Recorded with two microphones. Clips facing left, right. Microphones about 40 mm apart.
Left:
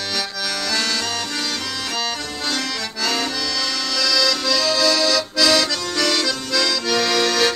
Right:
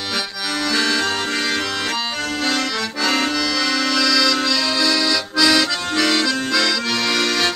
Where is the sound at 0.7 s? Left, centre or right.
Right.